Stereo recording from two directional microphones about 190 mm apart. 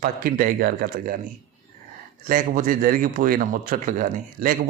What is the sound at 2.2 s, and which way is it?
A man's voice, 45° right (ahead or behind).